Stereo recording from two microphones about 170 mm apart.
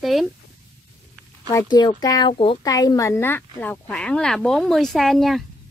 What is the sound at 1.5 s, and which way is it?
Speech, 25° left (ahead or behind).